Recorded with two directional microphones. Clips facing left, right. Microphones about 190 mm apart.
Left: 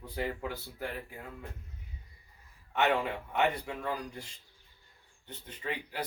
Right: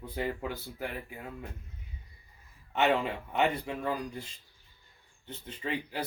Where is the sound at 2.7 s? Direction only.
25° right (ahead or behind).